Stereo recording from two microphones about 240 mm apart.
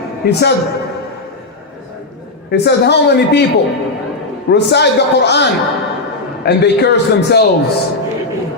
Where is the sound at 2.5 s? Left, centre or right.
Left.